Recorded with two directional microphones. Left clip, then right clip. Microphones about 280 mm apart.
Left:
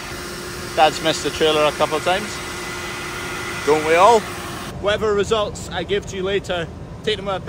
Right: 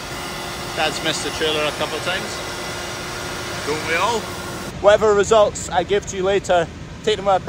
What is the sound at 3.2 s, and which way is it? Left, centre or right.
Vehicle, right.